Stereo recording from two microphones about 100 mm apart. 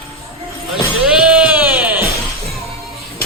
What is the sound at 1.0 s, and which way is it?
Music, 10° right (ahead or behind).